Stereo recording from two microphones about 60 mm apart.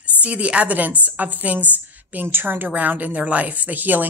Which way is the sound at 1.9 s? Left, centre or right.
Right.